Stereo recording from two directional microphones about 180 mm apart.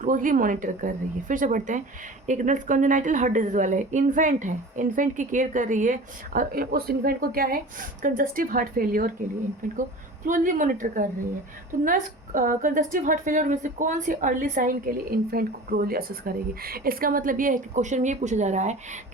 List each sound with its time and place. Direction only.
0.0 s a woman's voice: 45° right (ahead or behind)